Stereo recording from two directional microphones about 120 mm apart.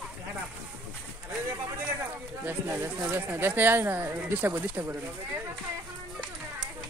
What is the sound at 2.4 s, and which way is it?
Speech, 15° right (ahead or behind).